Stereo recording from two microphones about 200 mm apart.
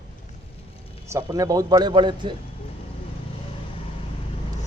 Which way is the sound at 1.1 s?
15° right (ahead or behind).